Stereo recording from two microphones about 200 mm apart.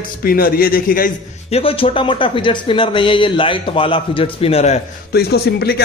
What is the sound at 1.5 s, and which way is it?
Speech, 30° left (ahead or behind).